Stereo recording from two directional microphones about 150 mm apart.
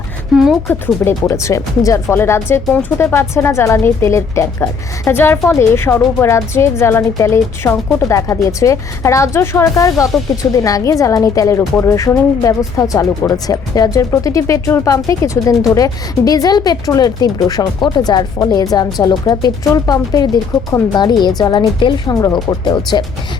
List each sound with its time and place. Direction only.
0.7 s a woman's voice: 15° left (ahead or behind)